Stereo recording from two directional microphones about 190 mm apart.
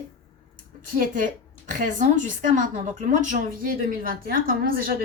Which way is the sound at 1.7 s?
40° right (ahead or behind).